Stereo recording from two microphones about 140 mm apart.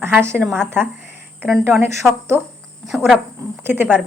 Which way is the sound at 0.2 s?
15° right (ahead or behind).